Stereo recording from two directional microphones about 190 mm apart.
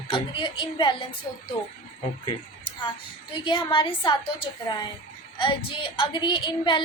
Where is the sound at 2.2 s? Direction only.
25° left (ahead or behind).